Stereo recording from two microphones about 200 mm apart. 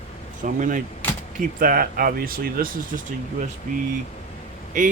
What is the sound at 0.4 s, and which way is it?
Speech, 40° right (ahead or behind).